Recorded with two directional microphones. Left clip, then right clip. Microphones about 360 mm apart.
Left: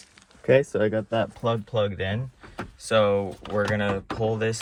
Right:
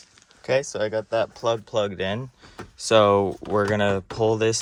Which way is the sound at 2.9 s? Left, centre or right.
Right.